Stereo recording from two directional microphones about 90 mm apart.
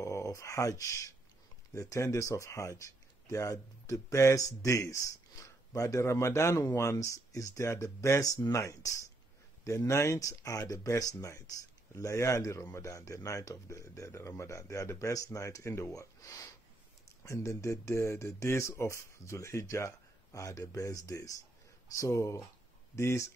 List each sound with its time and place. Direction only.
0.0 s speech: 35° left (ahead or behind)
17.2 s speech: 30° left (ahead or behind)